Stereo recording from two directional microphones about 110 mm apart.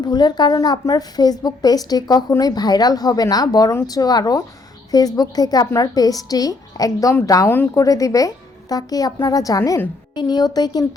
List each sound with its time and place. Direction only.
0.0 s a woman's voice: 40° left (ahead or behind)
7.4 s a woman's voice: 20° left (ahead or behind); by 10.8 s 35° left (ahead or behind)